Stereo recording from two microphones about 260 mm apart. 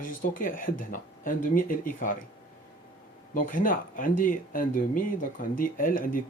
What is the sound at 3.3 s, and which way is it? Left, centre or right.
Speech, left.